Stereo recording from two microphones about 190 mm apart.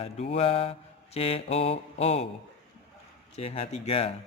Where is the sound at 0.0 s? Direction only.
30° left (ahead or behind).